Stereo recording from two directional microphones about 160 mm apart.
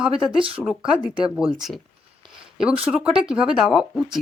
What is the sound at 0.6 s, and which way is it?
A woman's voice, 5° right (ahead or behind).